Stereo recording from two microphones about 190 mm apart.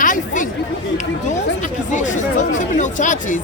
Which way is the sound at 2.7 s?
40° left (ahead or behind).